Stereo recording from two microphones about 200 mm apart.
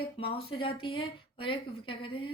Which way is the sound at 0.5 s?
25° left (ahead or behind).